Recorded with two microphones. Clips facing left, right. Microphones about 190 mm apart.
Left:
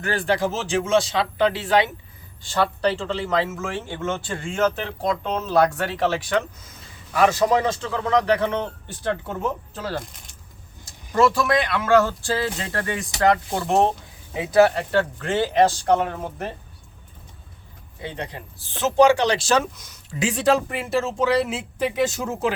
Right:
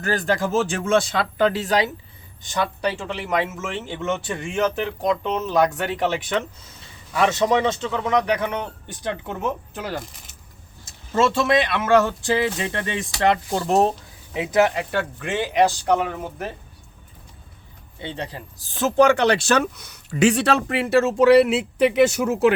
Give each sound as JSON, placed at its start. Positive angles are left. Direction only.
{"t": 0.0, "sound": "speech", "side_deg": -40}
{"t": 2.4, "sound": "speech", "side_deg": -15}
{"t": 10.0, "sound": "speech", "side_deg": -5}
{"t": 10.8, "sound": "speech", "side_deg": -25}
{"t": 18.0, "sound": "a man's voice", "side_deg": -30}
{"t": 19.0, "sound": "speech", "side_deg": -60}